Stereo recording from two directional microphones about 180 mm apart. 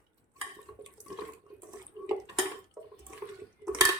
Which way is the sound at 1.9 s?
20° right (ahead or behind).